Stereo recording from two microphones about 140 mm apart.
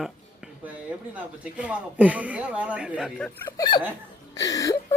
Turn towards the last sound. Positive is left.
turn(degrees=25)  # may be behind; listen again after turning